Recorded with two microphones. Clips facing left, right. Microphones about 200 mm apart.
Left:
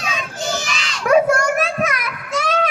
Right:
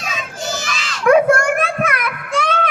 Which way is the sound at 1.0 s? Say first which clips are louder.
Right 2 dB; 55° right (ahead or behind).